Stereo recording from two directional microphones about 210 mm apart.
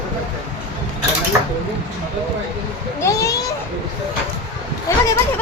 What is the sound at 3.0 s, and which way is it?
Speech, 15° left (ahead or behind).